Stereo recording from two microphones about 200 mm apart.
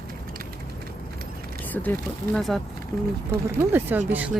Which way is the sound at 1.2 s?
50° right (ahead or behind).